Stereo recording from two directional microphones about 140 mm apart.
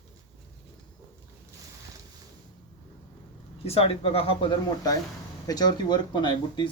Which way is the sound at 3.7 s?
45° left (ahead or behind).